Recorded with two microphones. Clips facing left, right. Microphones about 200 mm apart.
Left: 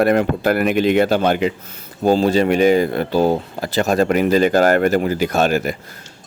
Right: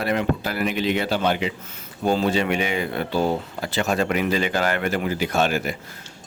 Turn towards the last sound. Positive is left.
turn(degrees=45)  # may be behind; listen again after turning